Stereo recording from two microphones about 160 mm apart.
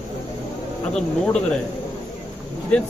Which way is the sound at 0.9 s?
5° left (ahead or behind).